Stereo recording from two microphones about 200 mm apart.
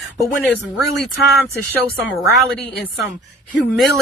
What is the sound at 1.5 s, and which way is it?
Speech, 10° right (ahead or behind).